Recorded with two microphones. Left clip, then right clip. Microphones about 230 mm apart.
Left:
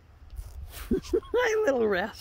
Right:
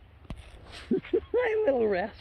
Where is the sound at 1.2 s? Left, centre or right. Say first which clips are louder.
Left 2 dB; centre.